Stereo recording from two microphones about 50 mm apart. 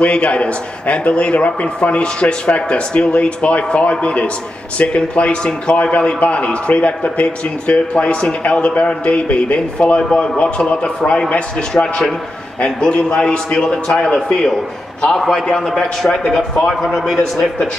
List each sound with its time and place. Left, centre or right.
0.0 s a man's voice: left; by 17.2 s centre
17.2 s a man's voice: centre